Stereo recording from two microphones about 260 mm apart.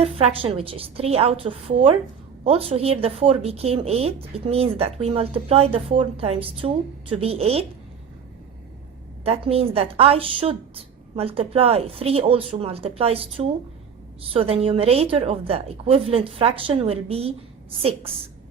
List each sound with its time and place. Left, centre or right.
0.0 s a woman's voice: right
9.2 s a woman's voice: right